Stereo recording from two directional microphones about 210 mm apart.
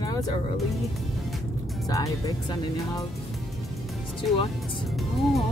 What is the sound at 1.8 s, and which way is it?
Speech, 15° left (ahead or behind).